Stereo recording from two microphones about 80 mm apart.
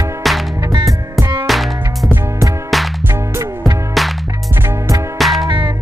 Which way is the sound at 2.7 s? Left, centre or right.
Centre.